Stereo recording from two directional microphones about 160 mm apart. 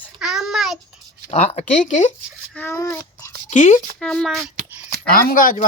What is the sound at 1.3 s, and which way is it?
Speech, 40° left (ahead or behind).